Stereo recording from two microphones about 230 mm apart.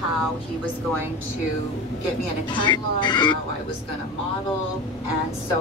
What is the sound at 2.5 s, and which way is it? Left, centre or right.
Speech, centre.